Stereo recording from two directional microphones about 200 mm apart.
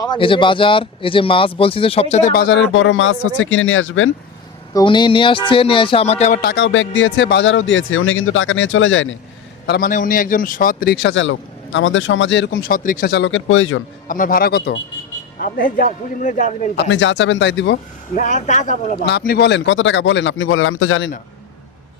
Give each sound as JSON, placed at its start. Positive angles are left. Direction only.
{"t": 0.0, "sound": "speech", "side_deg": 25}
{"t": 2.3, "sound": "speech", "side_deg": 55}
{"t": 2.7, "sound": "speech", "side_deg": 70}
{"t": 4.7, "sound": "speech", "side_deg": 20}
{"t": 6.4, "sound": "speech", "side_deg": 60}
{"t": 9.6, "sound": "a man's voice", "side_deg": 55}
{"t": 9.9, "sound": "speech", "side_deg": 45}
{"t": 14.1, "sound": "a man's voice", "side_deg": 45}
{"t": 16.7, "sound": "speech", "side_deg": 65}
{"t": 18.2, "sound": "a man's voice", "side_deg": 40}
{"t": 19.0, "sound": "speech", "side_deg": 50}